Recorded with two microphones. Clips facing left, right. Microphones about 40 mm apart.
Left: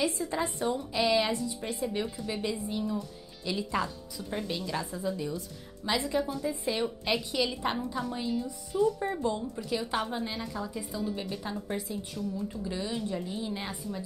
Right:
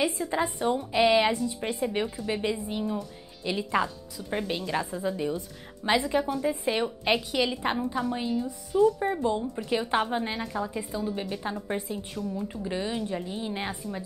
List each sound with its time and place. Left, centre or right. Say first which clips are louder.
0.0 s a woman's voice: right 3 dB; right